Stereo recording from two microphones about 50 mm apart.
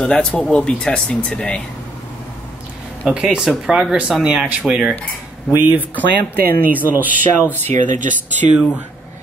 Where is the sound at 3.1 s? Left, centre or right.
Centre.